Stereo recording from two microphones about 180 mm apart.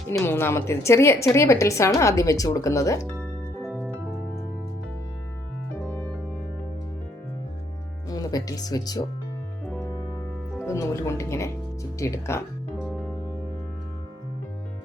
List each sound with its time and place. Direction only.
0.1 s a woman's voice: 15° left (ahead or behind)
3.6 s music: 5° right (ahead or behind)
5.9 s music: 10° left (ahead or behind)
8.1 s speech: 20° left (ahead or behind)
10.7 s a woman's voice: 15° left (ahead or behind)